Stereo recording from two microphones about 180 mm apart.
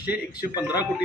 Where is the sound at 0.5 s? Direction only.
20° left (ahead or behind).